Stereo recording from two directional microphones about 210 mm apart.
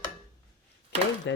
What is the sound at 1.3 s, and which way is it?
Speech, 60° left (ahead or behind).